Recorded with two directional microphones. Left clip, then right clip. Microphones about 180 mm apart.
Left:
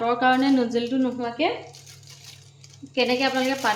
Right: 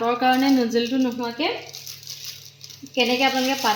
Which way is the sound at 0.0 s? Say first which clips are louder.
Right 1 dB; 10° right (ahead or behind).